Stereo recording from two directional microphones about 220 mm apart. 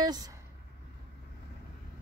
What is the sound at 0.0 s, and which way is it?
Speech, 20° right (ahead or behind).